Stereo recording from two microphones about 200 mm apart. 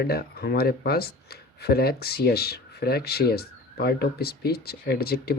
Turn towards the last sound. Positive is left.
turn(degrees=50)  # may be behind; listen again after turning